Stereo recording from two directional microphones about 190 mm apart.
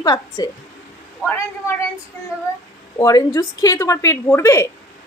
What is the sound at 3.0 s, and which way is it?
A woman's voice, 20° left (ahead or behind).